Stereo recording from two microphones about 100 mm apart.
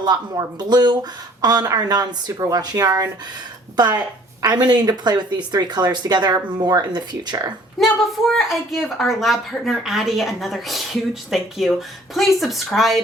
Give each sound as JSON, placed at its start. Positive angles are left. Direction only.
{"t": 0.0, "sound": "speech", "side_deg": -45}
{"t": 8.3, "sound": "a woman's voice", "side_deg": 0}